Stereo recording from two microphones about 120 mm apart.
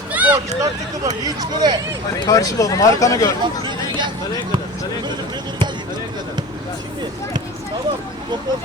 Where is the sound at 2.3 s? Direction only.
30° left (ahead or behind).